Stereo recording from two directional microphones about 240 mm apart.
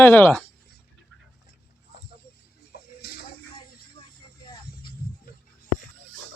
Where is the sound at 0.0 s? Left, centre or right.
Centre.